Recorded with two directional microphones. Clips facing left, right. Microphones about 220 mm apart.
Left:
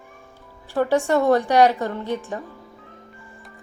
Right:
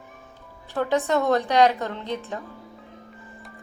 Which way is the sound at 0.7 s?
10° left (ahead or behind).